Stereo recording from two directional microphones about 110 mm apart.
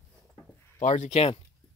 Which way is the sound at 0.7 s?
85° left.